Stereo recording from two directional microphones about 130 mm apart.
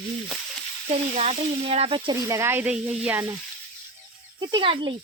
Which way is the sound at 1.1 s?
55° right (ahead or behind).